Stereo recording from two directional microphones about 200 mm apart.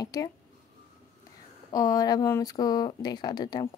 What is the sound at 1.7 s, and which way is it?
Speech, 20° left (ahead or behind).